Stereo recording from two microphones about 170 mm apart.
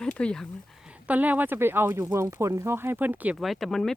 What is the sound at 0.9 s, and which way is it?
Speech, 10° right (ahead or behind).